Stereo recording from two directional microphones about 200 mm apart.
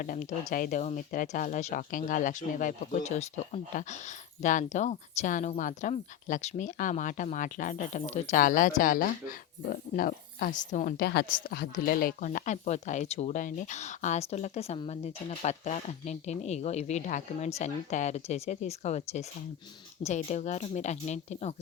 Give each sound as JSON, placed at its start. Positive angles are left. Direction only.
{"t": 0.0, "sound": "a woman's voice", "side_deg": 40}